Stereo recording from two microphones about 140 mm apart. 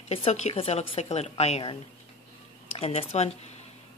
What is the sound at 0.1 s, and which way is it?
Speech, 50° left (ahead or behind).